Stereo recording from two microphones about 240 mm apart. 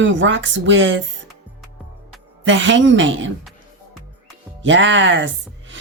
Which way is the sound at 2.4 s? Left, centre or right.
Right.